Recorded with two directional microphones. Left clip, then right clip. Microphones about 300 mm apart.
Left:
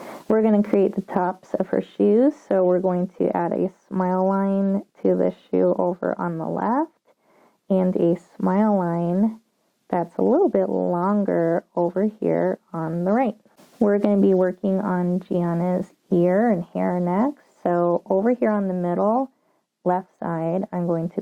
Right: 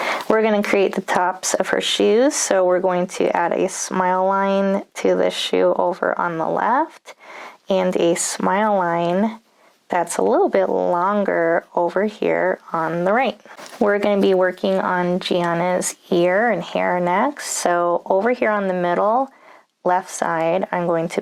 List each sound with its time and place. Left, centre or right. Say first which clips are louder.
0.0 s speech: right 4 dB; centre